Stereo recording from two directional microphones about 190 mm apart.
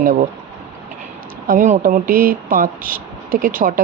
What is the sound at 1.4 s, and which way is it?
Speech, 45° right (ahead or behind).